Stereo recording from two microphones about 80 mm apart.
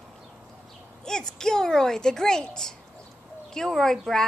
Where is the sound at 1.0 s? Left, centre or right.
Centre.